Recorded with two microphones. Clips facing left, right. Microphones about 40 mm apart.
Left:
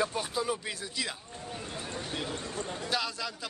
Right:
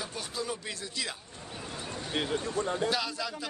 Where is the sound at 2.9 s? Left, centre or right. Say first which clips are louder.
Right 1 dB; centre.